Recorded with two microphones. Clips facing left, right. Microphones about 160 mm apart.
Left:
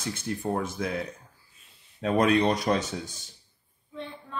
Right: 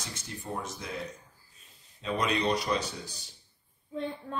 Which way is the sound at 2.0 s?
55° left (ahead or behind).